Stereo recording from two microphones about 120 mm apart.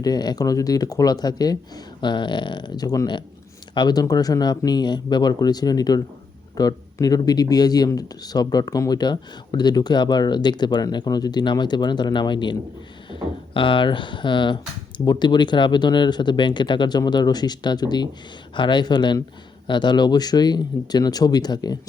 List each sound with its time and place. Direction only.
0.0 s speech: 35° left (ahead or behind)